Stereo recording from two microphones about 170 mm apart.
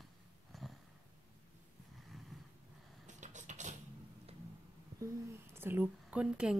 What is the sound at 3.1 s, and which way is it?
Vehicle, 45° right (ahead or behind).